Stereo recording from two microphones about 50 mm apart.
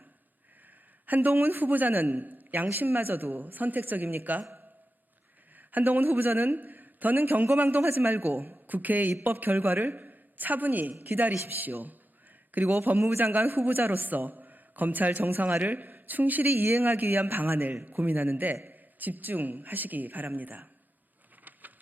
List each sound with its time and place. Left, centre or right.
1.0 s a man's voice: right
5.5 s a man's voice: right
10.9 s a man's voice: right
11.4 s a man's voice: right
21.5 s a sound: right